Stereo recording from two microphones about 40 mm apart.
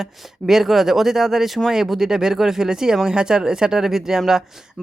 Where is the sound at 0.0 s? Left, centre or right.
Centre.